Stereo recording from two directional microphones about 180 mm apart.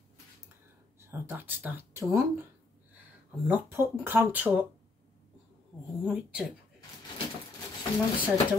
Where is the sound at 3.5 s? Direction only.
10° right (ahead or behind).